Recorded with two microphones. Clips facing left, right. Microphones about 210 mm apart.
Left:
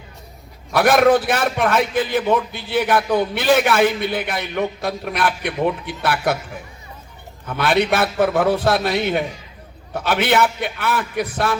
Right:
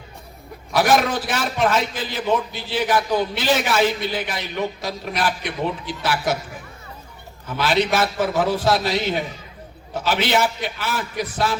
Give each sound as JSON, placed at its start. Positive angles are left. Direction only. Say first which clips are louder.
{"t": 0.7, "sound": "a man's voice", "louder": "left 5 dB", "side_deg": 55}
{"t": 7.4, "sound": "a man's voice", "louder": "left 2 dB", "side_deg": 55}